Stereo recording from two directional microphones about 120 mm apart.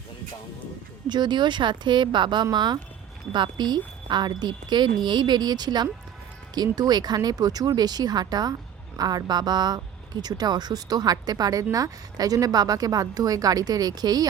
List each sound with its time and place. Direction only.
1.0 s speech: 40° right (ahead or behind)